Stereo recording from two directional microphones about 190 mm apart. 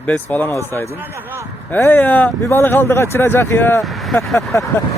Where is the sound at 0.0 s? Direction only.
10° left (ahead or behind).